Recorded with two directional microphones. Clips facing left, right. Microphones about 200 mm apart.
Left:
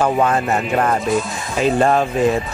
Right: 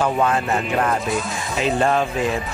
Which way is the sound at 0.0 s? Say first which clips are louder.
Left 3 dB; 45° left (ahead or behind).